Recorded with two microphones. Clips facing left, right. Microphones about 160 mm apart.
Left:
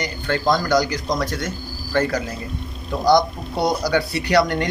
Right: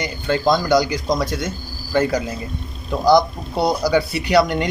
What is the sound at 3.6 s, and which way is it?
Speech, 5° right (ahead or behind).